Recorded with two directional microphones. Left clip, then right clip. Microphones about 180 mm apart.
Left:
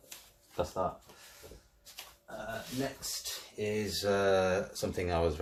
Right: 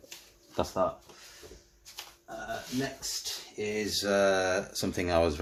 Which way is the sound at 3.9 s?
50° right (ahead or behind).